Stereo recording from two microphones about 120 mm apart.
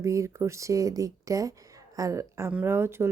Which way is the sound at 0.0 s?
25° right (ahead or behind).